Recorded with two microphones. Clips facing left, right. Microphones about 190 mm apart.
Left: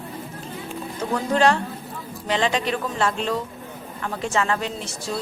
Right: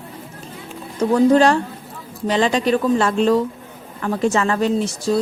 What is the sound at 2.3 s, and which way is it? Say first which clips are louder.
Speech: right 6 dB; 40° right (ahead or behind).